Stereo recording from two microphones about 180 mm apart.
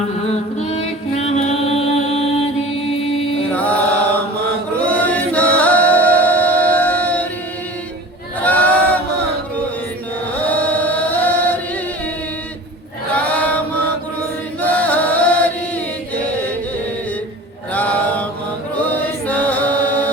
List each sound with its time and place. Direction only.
0.7 s music: 35° left (ahead or behind)
3.5 s mantra: 10° left (ahead or behind)
4.8 s chant: 10° left (ahead or behind)
8.4 s a sound: 10° left (ahead or behind)
10.4 s chant: 10° left (ahead or behind)
13.1 s chant: 10° left (ahead or behind)
14.6 s chant: 10° left (ahead or behind)
17.7 s mantra: 10° left (ahead or behind)
18.9 s chant: 10° left (ahead or behind)